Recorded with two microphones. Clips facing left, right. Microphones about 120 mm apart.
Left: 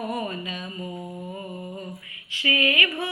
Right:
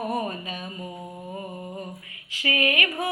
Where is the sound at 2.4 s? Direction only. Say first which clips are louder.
Even; 45° right (ahead or behind).